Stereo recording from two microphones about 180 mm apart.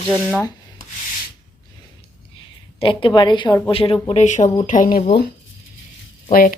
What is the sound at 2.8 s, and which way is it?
A woman's voice, 30° left (ahead or behind).